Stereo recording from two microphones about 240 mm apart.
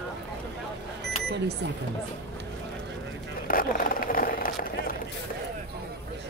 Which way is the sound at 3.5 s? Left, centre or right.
Left.